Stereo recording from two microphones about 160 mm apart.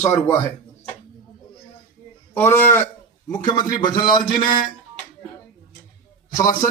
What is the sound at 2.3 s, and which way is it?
Speech, 15° left (ahead or behind).